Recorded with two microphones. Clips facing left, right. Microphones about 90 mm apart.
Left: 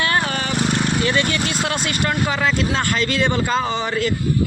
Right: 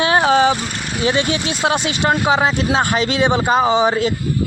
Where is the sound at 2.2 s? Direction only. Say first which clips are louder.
Right 4 dB; 60° right (ahead or behind).